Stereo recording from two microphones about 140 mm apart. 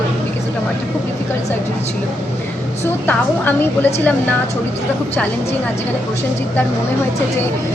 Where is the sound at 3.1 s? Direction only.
15° left (ahead or behind).